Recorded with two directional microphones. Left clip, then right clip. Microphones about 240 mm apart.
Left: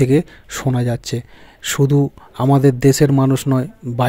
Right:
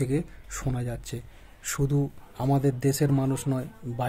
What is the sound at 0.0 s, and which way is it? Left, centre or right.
Speech, left.